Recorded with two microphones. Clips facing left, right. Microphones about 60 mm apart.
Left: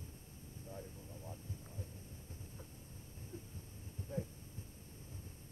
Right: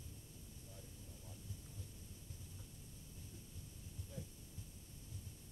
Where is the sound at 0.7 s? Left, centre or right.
Left.